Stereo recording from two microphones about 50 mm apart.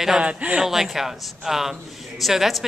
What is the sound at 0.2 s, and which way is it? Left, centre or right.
Speech, right.